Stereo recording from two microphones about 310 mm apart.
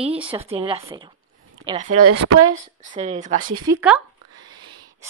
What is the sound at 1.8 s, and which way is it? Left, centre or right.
Speech, right.